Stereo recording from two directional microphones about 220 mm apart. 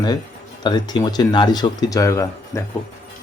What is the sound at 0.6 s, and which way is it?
Speech, 20° left (ahead or behind).